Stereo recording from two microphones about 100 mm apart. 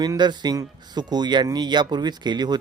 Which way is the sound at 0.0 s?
45° right (ahead or behind).